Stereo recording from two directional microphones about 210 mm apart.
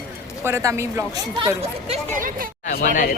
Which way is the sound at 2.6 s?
35° left (ahead or behind).